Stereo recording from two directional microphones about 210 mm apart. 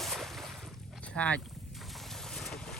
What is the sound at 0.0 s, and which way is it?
Boat, centre (ahead or behind).